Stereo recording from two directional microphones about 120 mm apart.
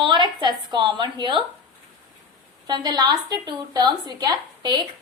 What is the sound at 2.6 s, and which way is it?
A woman's voice, 35° right (ahead or behind).